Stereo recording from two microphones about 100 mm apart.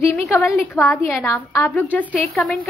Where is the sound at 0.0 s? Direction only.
25° left (ahead or behind).